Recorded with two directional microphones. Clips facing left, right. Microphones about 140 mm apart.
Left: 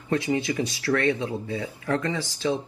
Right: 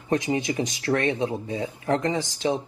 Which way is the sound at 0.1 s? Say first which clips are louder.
Right 1 dB; 20° right (ahead or behind).